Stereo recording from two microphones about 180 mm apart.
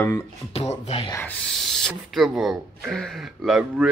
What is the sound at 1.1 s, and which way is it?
Speech, 15° left (ahead or behind).